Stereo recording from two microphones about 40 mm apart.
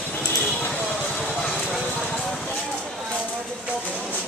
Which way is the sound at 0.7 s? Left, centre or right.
Centre.